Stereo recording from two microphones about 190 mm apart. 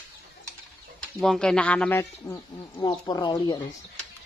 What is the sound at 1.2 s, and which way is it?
Speech, 5° left (ahead or behind).